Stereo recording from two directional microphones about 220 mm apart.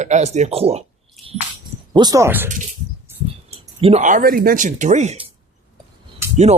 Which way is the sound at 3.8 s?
30° right (ahead or behind).